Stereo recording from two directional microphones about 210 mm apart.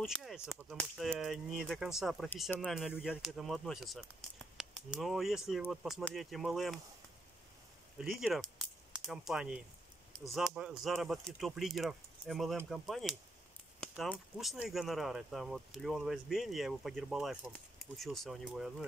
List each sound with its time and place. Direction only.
0.0 s speech: centre (ahead or behind)
8.0 s speech: centre (ahead or behind)